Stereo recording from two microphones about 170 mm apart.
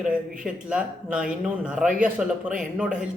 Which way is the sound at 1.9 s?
50° right (ahead or behind).